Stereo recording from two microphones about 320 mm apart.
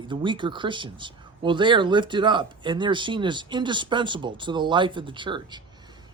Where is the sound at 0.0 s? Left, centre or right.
Centre.